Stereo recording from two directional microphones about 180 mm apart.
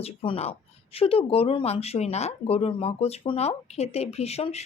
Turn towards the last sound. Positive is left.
turn(degrees=35)  # may be behind; listen again after turning